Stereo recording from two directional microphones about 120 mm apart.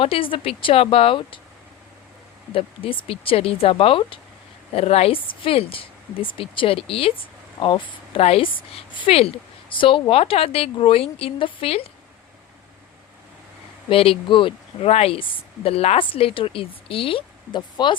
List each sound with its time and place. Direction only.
0.0 s speech: 50° left (ahead or behind)
2.5 s speech: 50° left (ahead or behind)
4.7 s speech: 60° left (ahead or behind); by 8.2 s 40° left (ahead or behind)
8.2 s speech: 55° left (ahead or behind)
13.9 s speech: 50° left (ahead or behind)